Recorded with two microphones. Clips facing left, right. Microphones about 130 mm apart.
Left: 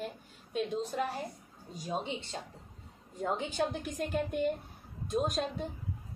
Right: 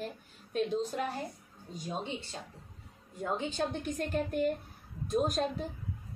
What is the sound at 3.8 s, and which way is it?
A woman's voice, centre (ahead or behind).